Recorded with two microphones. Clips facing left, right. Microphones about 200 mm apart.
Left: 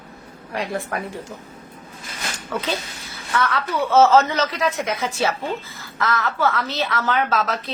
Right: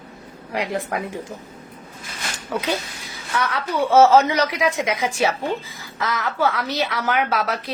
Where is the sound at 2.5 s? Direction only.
15° right (ahead or behind).